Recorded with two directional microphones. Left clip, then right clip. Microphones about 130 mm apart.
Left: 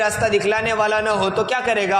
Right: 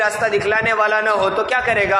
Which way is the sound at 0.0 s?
35° left (ahead or behind).